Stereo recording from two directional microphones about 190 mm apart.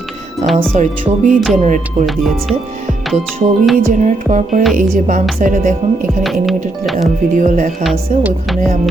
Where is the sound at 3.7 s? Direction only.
40° right (ahead or behind).